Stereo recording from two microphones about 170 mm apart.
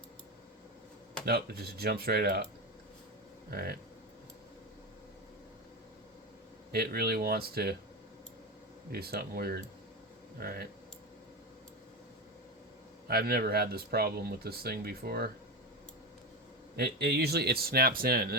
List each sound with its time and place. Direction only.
1.2 s speech: 65° right (ahead or behind)
6.7 s speech: 65° right (ahead or behind)
8.9 s speech: 65° right (ahead or behind)
13.1 s speech: 65° right (ahead or behind)
16.7 s speech: 70° right (ahead or behind)